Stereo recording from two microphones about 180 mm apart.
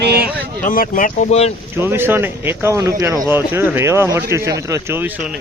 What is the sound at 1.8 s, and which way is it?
Speech, 15° right (ahead or behind).